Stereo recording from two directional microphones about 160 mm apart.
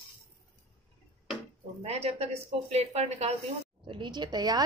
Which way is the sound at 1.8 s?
40° right (ahead or behind).